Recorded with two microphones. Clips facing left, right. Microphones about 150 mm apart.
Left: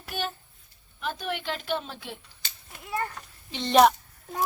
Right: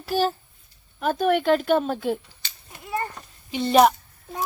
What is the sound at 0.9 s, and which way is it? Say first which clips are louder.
A woman's voice: right 11 dB; 50° right (ahead or behind).